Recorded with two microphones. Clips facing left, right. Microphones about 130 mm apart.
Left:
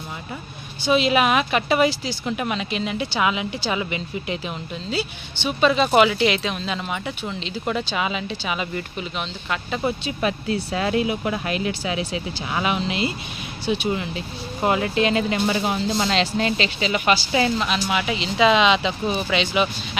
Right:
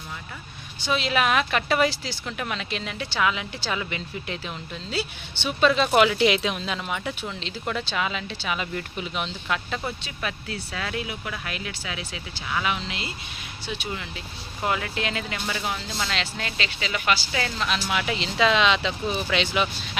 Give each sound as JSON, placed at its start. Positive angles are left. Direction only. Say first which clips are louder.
{"t": 0.9, "sound": "speech", "louder": "left 5 dB", "side_deg": 10}
{"t": 9.8, "sound": "speech", "louder": "left 8 dB", "side_deg": 25}
{"t": 17.8, "sound": "speech", "louder": "left 3 dB", "side_deg": 5}